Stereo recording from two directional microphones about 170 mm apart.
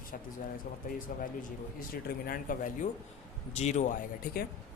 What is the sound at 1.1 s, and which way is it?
Speech, 50° left (ahead or behind).